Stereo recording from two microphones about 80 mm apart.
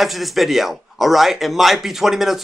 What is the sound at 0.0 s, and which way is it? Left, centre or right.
A man's voice, centre.